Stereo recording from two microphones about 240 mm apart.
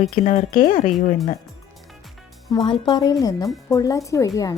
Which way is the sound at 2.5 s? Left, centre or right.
Centre.